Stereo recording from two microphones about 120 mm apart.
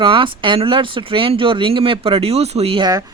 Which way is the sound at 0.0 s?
45° right (ahead or behind).